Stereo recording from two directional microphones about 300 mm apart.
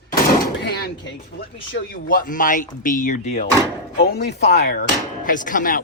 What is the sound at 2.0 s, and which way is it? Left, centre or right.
Speech, left.